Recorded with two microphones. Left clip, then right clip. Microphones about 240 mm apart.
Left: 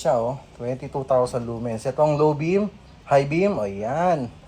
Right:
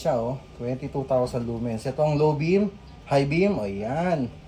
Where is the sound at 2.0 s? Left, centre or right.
Left.